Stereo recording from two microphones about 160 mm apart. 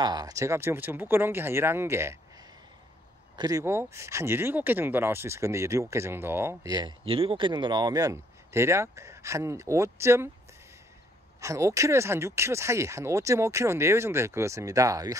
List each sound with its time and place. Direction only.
0.0 s speech: 25° right (ahead or behind)
3.3 s speech: 20° right (ahead or behind)
11.4 s speech: 20° right (ahead or behind)